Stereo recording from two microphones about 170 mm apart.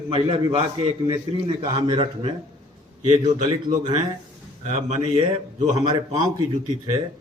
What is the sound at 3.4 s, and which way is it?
Speech, 30° right (ahead or behind).